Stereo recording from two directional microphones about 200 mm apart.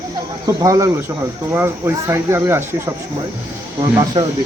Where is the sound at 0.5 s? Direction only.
15° right (ahead or behind).